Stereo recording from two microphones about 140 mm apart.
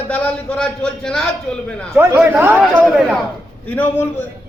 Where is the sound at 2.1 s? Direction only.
15° right (ahead or behind).